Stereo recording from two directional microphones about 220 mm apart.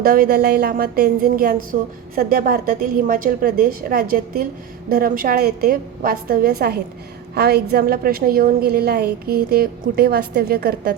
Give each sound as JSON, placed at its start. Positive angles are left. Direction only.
{"t": 0.0, "sound": "a woman's voice", "side_deg": -40}